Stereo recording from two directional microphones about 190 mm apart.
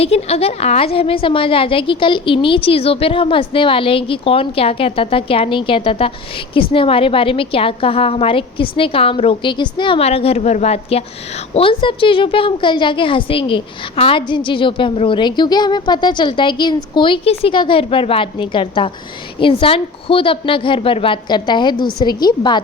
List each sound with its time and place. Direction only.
0.0 s a woman's voice: 30° left (ahead or behind)